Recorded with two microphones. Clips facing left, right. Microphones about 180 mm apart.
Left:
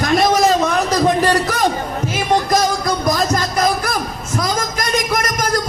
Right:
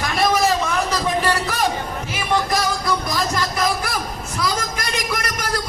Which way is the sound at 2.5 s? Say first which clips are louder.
Left 4 dB; 40° left (ahead or behind).